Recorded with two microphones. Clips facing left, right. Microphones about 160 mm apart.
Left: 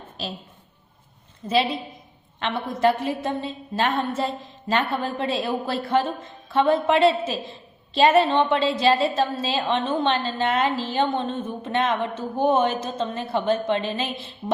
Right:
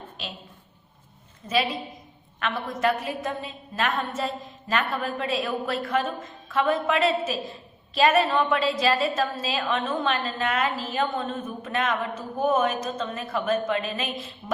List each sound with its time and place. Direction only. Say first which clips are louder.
0.2 s a woman's voice: left 6 dB; 35° left (ahead or behind)
1.4 s a woman's voice: left 3 dB; 30° left (ahead or behind)